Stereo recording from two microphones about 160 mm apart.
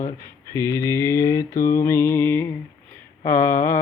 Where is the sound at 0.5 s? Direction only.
20° left (ahead or behind).